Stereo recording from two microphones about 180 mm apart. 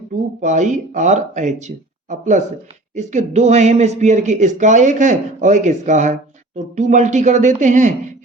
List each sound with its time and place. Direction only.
0.4 s speech: 40° right (ahead or behind)